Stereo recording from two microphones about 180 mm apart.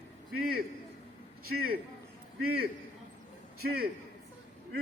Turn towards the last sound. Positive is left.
turn(degrees=-60)  # may be behind; listen again after turning